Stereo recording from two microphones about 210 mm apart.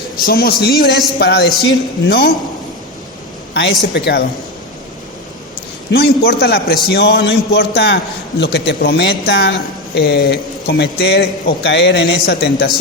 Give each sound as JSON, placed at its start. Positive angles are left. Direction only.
{"t": 0.2, "sound": "a man's voice", "side_deg": 45}
{"t": 3.5, "sound": "a man's voice", "side_deg": 55}
{"t": 5.9, "sound": "a man's voice", "side_deg": 50}